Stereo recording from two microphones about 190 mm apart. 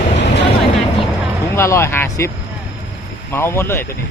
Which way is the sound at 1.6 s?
15° left (ahead or behind).